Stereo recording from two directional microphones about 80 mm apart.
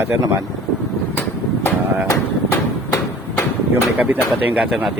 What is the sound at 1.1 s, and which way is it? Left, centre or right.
Vehicle, left.